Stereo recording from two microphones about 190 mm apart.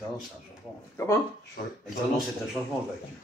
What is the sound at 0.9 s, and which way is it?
Speech, 15° left (ahead or behind).